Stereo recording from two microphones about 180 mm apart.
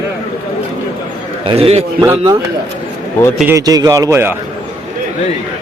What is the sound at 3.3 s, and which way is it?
A man's voice, 15° right (ahead or behind).